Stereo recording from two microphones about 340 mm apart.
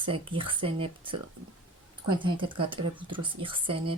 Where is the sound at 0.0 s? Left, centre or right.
Centre.